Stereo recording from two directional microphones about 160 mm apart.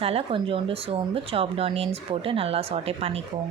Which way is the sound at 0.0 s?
40° right (ahead or behind).